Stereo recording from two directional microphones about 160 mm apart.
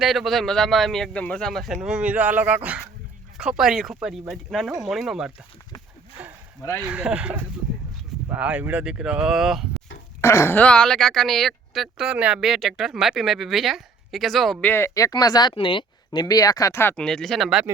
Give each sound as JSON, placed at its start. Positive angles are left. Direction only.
{"t": 0.0, "sound": "speech", "side_deg": 0}
{"t": 6.2, "sound": "a sound", "side_deg": -10}
{"t": 6.8, "sound": "speech", "side_deg": -10}
{"t": 10.2, "sound": "speech", "side_deg": 15}
{"t": 14.7, "sound": "speech", "side_deg": 15}